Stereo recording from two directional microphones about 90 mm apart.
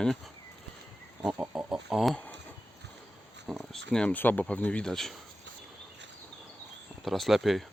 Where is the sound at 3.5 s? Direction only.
5° left (ahead or behind).